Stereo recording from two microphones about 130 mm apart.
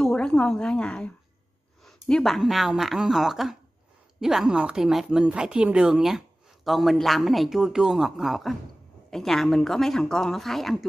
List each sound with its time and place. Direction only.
0.0 s a woman's voice: 5° left (ahead or behind)